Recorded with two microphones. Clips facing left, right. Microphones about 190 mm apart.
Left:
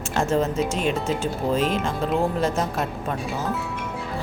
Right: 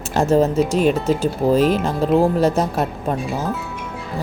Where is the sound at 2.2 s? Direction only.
35° right (ahead or behind).